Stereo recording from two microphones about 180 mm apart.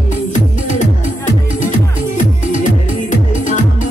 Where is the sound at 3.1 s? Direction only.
45° left (ahead or behind).